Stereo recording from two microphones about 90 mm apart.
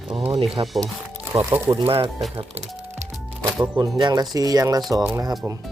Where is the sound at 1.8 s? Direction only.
90° right.